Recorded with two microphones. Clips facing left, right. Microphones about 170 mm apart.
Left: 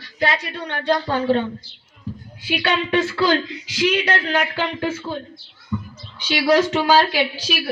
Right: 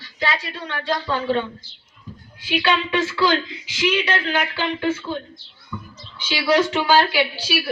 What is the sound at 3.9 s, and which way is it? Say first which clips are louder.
Speech: left 1 dB; 45° left (ahead or behind).